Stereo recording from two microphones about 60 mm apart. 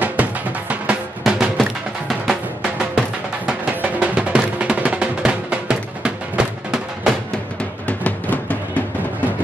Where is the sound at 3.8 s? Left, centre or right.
Right.